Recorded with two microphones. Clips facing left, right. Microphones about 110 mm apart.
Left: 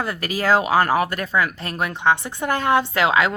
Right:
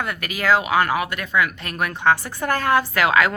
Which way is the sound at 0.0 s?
30° left (ahead or behind).